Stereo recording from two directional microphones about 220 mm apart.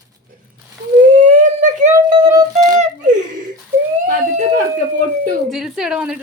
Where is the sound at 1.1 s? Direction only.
35° right (ahead or behind).